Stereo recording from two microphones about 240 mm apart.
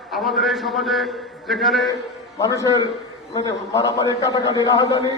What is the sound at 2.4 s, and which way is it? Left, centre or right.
A man's voice, centre.